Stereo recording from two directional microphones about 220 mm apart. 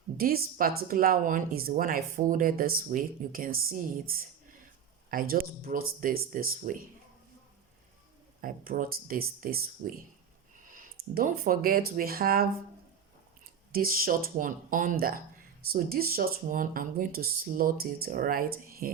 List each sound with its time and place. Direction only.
0.2 s speech: 40° right (ahead or behind)
8.4 s speech: 40° right (ahead or behind)
13.7 s speech: 40° right (ahead or behind)